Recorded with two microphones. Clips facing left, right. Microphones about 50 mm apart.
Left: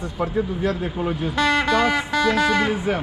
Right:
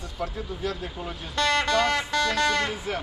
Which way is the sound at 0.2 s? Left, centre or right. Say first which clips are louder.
Left 8 dB; left.